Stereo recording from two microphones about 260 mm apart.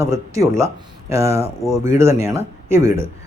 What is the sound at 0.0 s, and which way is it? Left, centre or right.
A man's voice, centre.